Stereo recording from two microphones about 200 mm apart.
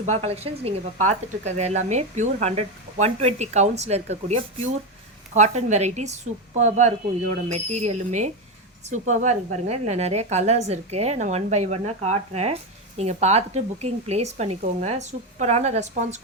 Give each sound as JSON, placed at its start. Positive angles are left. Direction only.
{"t": 0.0, "sound": "a woman's voice", "side_deg": -35}